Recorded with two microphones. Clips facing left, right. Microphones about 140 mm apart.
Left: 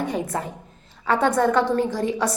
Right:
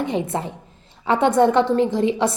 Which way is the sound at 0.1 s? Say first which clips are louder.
Right 3 dB; 25° right (ahead or behind).